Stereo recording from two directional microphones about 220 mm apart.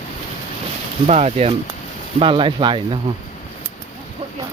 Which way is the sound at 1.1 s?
30° right (ahead or behind).